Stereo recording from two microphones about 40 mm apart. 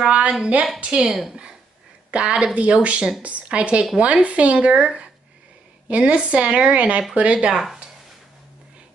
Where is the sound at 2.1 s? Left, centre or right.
Right.